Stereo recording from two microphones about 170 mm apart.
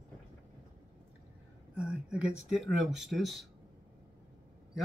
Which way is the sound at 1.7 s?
5° right (ahead or behind).